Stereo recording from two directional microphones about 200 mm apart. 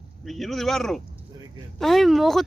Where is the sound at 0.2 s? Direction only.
Centre (ahead or behind).